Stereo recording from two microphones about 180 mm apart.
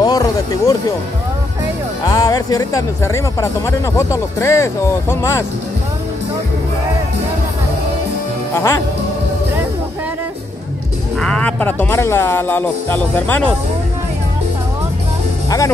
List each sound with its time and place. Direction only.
0.0 s speech: 20° left (ahead or behind)
2.0 s speech: 20° left (ahead or behind)
8.5 s speech: 15° left (ahead or behind)
11.1 s speech: 5° left (ahead or behind)